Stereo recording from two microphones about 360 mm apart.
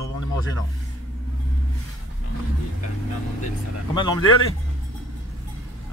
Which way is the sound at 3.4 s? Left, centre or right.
Centre.